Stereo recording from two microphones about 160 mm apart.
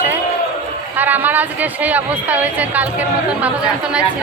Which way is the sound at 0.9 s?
10° right (ahead or behind).